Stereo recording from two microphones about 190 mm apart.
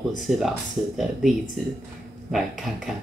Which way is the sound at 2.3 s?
Centre (ahead or behind).